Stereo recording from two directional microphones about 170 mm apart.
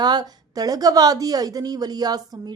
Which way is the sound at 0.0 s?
25° right (ahead or behind).